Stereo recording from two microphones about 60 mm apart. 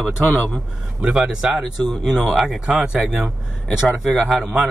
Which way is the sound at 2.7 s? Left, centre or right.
Centre.